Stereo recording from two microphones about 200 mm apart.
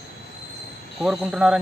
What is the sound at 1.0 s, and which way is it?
Speech, centre (ahead or behind).